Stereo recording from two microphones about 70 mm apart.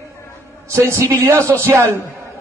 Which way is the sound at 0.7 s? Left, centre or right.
Right.